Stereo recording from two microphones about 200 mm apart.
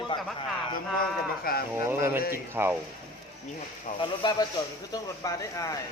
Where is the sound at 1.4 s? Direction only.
50° left (ahead or behind).